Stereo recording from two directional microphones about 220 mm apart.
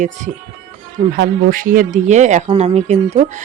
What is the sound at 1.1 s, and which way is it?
Speech, 40° right (ahead or behind).